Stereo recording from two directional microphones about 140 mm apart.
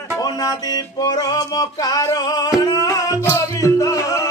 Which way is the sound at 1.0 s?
30° left (ahead or behind).